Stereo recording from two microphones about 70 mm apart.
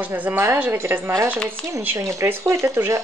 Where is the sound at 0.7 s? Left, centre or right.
Right.